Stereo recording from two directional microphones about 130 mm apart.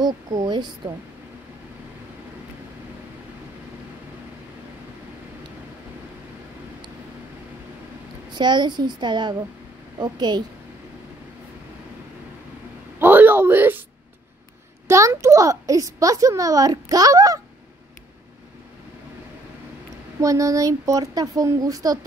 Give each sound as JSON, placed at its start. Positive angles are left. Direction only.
{"t": 0.0, "sound": "a child's voice", "side_deg": -30}
{"t": 8.3, "sound": "a child's voice", "side_deg": -35}
{"t": 13.0, "sound": "a sound", "side_deg": -15}
{"t": 14.9, "sound": "a child's voice", "side_deg": -25}
{"t": 20.2, "sound": "speech", "side_deg": -25}